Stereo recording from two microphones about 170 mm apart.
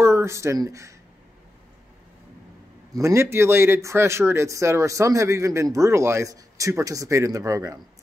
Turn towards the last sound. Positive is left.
turn(degrees=-20)  # may be behind; listen again after turning